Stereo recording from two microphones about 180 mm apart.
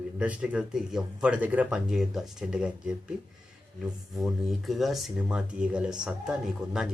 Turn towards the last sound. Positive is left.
turn(degrees=-5)  # may be behind; listen again after turning